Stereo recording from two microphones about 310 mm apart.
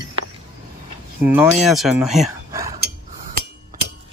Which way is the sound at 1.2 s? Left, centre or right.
Centre.